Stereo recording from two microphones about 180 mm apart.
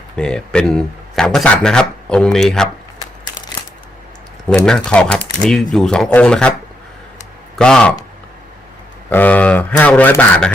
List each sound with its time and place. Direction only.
0.2 s speech: 5° left (ahead or behind)
4.4 s speech: 5° left (ahead or behind)
7.5 s speech: 5° left (ahead or behind)
9.0 s speech: 10° left (ahead or behind)